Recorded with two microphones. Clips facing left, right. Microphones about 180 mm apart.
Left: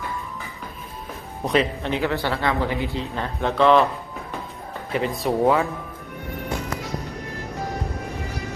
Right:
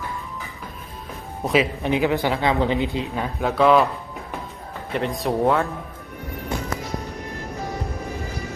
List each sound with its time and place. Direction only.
1.8 s speech: 15° right (ahead or behind)
3.4 s speech: 5° right (ahead or behind)
4.9 s speech: centre (ahead or behind)